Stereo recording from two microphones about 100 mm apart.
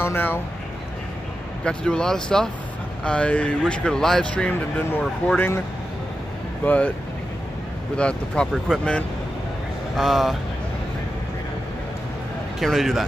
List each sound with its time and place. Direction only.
0.0 s speech: 20° left (ahead or behind)
1.6 s speech: 10° left (ahead or behind)
6.6 s speech: 15° left (ahead or behind)
7.9 s speech: 10° left (ahead or behind)
9.9 s a man's voice: centre (ahead or behind)
12.5 s a man's voice: centre (ahead or behind)